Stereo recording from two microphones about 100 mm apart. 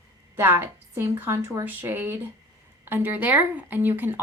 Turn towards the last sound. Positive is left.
turn(degrees=-20)  # may be behind; listen again after turning